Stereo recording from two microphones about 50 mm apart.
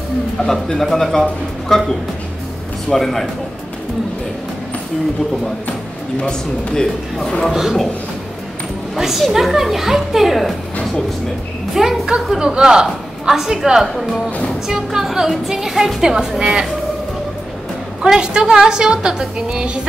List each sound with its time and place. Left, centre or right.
0.4 s speech: centre
2.9 s speech: centre
6.2 s speech: centre
8.9 s speech: centre
11.7 s a woman's voice: centre
18.0 s a woman's voice: centre